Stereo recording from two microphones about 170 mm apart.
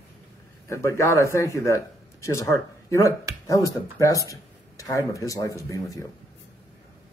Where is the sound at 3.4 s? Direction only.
20° left (ahead or behind).